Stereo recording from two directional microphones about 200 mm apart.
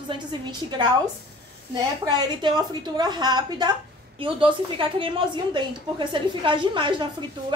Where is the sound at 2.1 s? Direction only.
20° right (ahead or behind).